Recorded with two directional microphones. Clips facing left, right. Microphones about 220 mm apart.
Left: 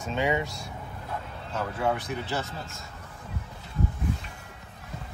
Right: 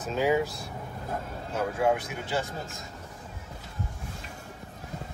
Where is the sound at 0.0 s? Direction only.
Centre (ahead or behind).